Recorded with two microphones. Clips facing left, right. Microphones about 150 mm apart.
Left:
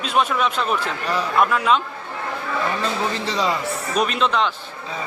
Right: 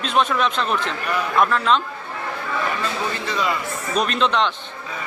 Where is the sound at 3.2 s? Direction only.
35° left (ahead or behind).